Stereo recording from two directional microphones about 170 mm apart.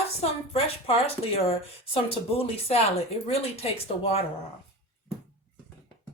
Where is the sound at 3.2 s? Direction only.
35° left (ahead or behind).